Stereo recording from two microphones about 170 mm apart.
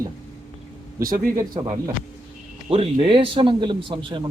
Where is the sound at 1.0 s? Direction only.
55° right (ahead or behind).